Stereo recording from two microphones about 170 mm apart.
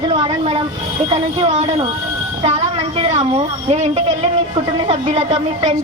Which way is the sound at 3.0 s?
40° right (ahead or behind).